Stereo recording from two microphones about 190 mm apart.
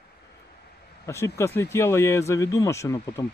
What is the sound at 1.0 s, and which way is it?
Speech, 15° left (ahead or behind).